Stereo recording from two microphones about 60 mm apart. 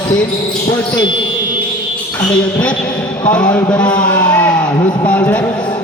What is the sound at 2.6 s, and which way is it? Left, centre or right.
A man's voice, left.